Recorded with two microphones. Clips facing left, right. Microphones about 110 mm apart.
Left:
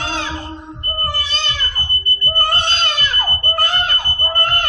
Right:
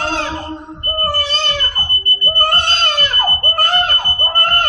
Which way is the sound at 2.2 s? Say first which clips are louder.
Right 2 dB; 50° right (ahead or behind).